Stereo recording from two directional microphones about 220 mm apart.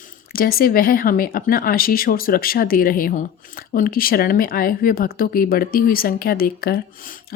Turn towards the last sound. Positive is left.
turn(degrees=40)  # may be behind; listen again after turning